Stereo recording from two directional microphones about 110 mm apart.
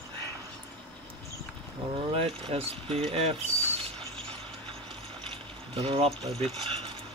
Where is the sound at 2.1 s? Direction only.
60° right (ahead or behind).